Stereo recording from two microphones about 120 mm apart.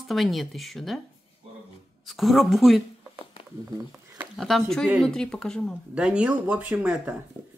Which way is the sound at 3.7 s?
20° right (ahead or behind).